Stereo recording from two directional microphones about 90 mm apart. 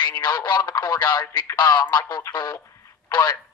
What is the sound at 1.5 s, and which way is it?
Speech, 35° left (ahead or behind).